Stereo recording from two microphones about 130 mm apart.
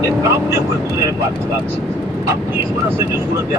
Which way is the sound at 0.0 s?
25° right (ahead or behind).